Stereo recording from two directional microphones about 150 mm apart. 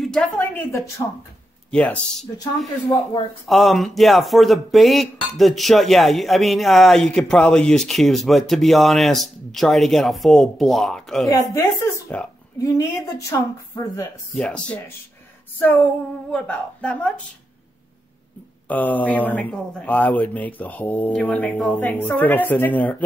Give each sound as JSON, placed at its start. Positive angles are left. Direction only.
{"t": 0.0, "sound": "a sound", "side_deg": 5}
{"t": 1.7, "sound": "speech", "side_deg": 5}
{"t": 3.4, "sound": "speech", "side_deg": 0}
{"t": 11.2, "sound": "a woman's voice", "side_deg": 25}
{"t": 14.3, "sound": "speech", "side_deg": 5}
{"t": 16.3, "sound": "speech", "side_deg": 10}
{"t": 18.7, "sound": "speech", "side_deg": 10}